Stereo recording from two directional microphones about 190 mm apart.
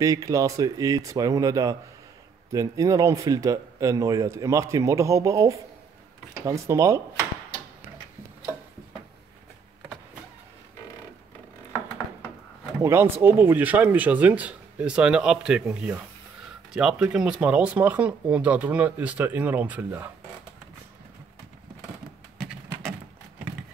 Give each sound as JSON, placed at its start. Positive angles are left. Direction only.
{"t": 0.0, "sound": "speech", "side_deg": -15}
{"t": 12.8, "sound": "speech", "side_deg": -10}